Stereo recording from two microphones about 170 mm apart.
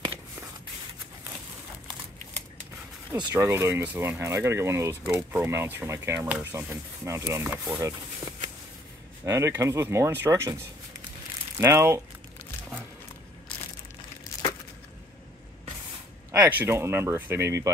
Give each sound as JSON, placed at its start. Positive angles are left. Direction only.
{"t": 3.2, "sound": "speech", "side_deg": -15}
{"t": 9.2, "sound": "speech", "side_deg": -15}
{"t": 16.3, "sound": "speech", "side_deg": -10}